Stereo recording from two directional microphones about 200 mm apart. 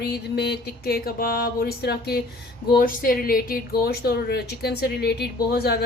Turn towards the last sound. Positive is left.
turn(degrees=50)  # may be behind; listen again after turning